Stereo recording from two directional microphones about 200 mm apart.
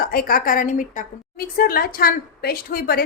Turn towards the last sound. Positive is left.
turn(degrees=50)  # may be behind; listen again after turning